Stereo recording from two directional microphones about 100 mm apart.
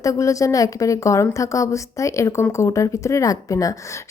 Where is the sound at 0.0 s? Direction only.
35° left (ahead or behind).